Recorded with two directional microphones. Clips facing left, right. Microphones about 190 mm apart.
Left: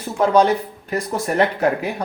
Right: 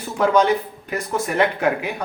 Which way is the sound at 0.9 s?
40° left (ahead or behind).